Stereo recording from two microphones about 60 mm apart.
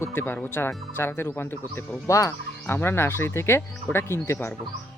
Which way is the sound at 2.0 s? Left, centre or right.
Left.